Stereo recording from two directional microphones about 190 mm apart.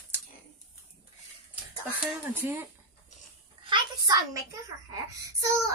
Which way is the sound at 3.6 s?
20° right (ahead or behind).